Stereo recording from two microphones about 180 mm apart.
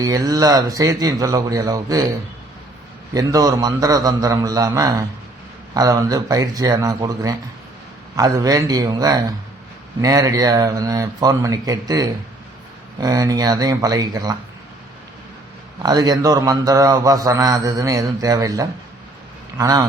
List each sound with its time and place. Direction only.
0.0 s speech: 20° right (ahead or behind)
3.1 s speech: 20° right (ahead or behind)
15.8 s speech: 20° right (ahead or behind)